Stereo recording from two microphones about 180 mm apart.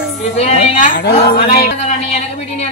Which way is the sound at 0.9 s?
65° left (ahead or behind).